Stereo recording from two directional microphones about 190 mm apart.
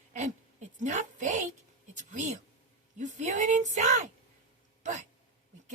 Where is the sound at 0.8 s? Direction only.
40° right (ahead or behind).